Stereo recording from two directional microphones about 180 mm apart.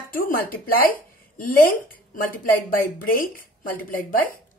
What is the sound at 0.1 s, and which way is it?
Speech, 55° left (ahead or behind).